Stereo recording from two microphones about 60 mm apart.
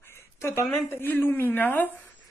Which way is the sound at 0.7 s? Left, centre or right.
Left.